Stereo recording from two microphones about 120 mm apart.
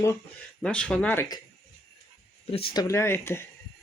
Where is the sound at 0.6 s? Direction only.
5° left (ahead or behind).